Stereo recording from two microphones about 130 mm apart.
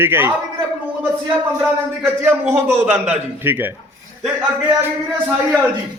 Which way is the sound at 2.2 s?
20° right (ahead or behind).